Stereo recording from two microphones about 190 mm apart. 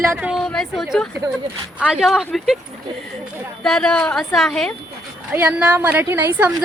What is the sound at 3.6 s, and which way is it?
A woman's voice, 5° left (ahead or behind).